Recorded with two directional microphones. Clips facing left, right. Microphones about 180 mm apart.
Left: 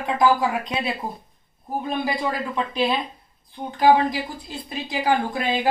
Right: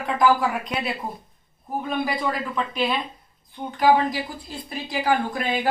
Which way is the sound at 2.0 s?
25° left (ahead or behind).